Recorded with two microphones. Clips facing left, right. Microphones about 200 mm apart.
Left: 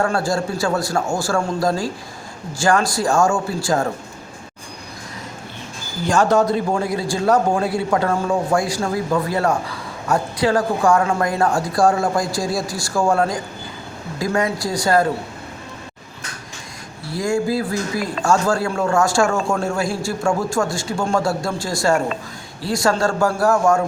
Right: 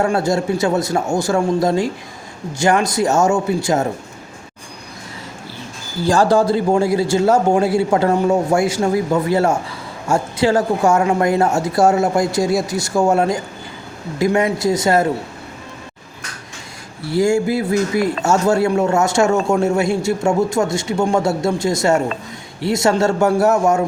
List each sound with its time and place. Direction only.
0.0 s a man's voice: 20° right (ahead or behind)
6.1 s a man's voice: 35° right (ahead or behind)
17.1 s a man's voice: 25° right (ahead or behind)